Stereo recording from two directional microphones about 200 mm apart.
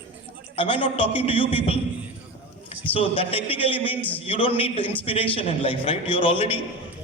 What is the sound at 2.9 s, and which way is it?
A man's voice, 25° left (ahead or behind).